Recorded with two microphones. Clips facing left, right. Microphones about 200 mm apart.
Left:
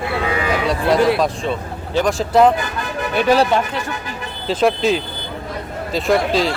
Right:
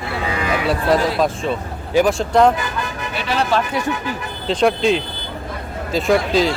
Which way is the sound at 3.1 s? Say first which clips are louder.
Left 10 dB; 45° left (ahead or behind).